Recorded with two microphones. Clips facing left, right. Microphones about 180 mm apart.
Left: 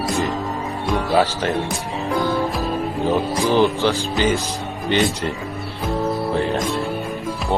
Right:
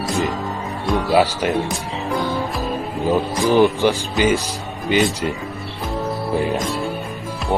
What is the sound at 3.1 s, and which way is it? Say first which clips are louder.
Speech: right 3 dB; 15° right (ahead or behind).